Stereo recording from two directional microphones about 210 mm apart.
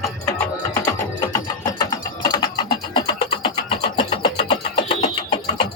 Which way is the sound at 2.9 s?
25° left (ahead or behind).